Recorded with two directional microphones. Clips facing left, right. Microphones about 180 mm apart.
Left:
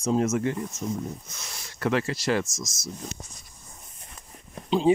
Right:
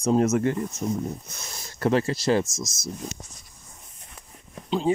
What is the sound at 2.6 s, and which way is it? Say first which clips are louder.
Speech: right 3 dB; 55° right (ahead or behind).